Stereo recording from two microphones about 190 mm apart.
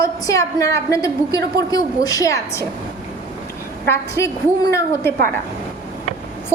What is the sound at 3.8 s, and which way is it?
A woman's voice, 15° left (ahead or behind).